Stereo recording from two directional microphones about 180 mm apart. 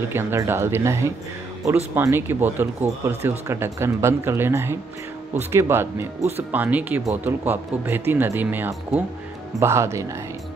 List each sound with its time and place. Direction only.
0.1 s speech: 15° right (ahead or behind)